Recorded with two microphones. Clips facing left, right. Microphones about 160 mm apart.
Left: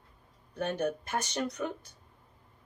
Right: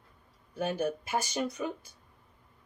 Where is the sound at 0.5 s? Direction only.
5° right (ahead or behind).